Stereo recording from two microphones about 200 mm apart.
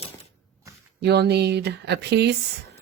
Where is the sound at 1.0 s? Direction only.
55° right (ahead or behind).